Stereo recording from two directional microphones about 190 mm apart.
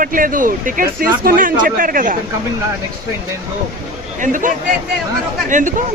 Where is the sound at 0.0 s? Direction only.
45° right (ahead or behind).